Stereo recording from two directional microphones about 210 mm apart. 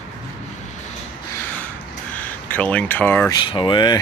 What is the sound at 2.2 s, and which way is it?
Speech, 5° left (ahead or behind).